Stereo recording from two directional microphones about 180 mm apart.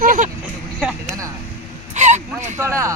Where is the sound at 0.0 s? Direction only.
50° right (ahead or behind).